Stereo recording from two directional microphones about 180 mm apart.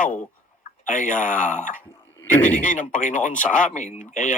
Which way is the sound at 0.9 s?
45° left (ahead or behind).